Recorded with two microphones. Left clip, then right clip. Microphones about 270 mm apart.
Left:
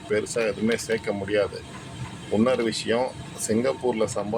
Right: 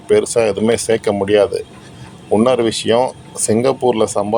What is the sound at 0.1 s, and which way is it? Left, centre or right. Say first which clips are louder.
Speech: right 12 dB; right.